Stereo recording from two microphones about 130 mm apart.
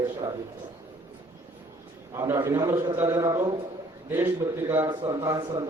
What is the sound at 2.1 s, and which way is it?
A man's voice, 25° right (ahead or behind).